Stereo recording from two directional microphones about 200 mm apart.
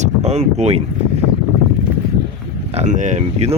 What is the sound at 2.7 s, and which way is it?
Speech, 35° right (ahead or behind).